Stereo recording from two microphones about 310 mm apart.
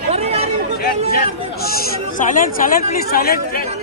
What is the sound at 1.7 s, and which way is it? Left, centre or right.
Speech, left.